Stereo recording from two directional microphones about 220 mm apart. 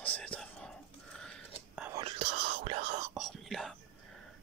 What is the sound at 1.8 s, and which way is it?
Whispering, 20° right (ahead or behind).